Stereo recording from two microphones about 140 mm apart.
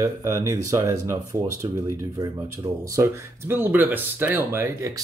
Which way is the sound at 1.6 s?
35° right (ahead or behind).